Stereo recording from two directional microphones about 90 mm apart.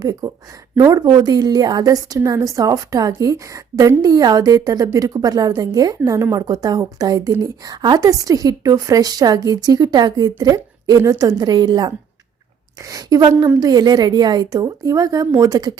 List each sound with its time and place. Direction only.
0.0 s a woman's voice: 40° right (ahead or behind)
12.8 s a woman's voice: 40° right (ahead or behind)